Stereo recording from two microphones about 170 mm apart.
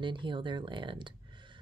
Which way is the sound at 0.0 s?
30° right (ahead or behind).